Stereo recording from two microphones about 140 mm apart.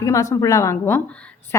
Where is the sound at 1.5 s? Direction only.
20° left (ahead or behind).